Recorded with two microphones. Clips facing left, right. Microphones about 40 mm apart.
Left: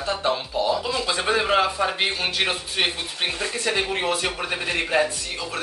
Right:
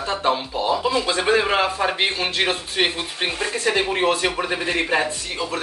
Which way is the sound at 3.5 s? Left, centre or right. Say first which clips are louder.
Right 5 dB; right.